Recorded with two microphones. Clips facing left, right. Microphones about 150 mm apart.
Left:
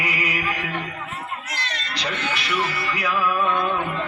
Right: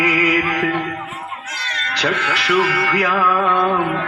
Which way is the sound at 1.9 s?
75° right (ahead or behind).